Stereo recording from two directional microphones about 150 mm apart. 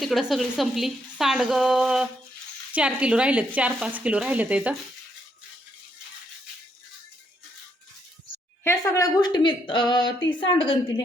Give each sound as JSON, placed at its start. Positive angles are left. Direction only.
{"t": 0.0, "sound": "speech", "side_deg": 0}
{"t": 8.6, "sound": "a woman's voice", "side_deg": 20}